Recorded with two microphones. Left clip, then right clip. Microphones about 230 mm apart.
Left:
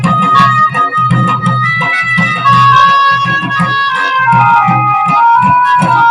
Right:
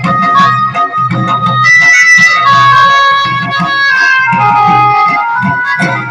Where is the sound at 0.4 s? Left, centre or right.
Left.